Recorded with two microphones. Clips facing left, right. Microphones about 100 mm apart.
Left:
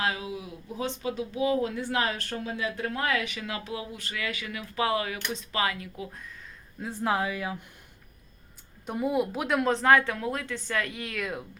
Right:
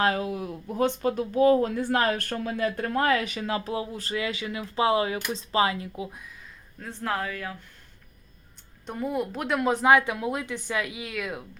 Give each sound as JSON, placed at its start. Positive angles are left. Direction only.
{"t": 0.0, "sound": "speech", "side_deg": -50}
{"t": 6.7, "sound": "speech", "side_deg": 10}
{"t": 8.9, "sound": "speech", "side_deg": 5}
{"t": 9.7, "sound": "speech", "side_deg": -15}